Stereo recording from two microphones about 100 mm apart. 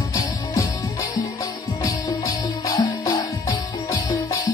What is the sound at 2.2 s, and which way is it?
Music, 40° left (ahead or behind).